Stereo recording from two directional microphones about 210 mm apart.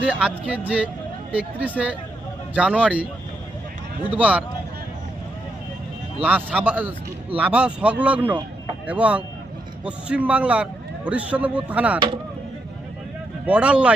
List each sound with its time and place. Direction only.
0.0 s a man's voice: 5° right (ahead or behind)
4.1 s a man's voice: 5° right (ahead or behind)
6.2 s a man's voice: 5° right (ahead or behind)
11.9 s speech: 25° right (ahead or behind)
13.4 s speech: 5° right (ahead or behind)